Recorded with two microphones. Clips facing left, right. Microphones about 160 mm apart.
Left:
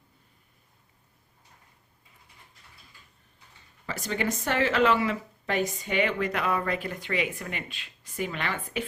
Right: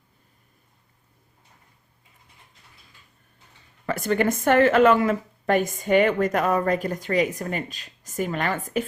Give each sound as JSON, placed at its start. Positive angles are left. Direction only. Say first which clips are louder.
{"t": 3.8, "sound": "a woman's voice", "louder": "right 8 dB", "side_deg": -55}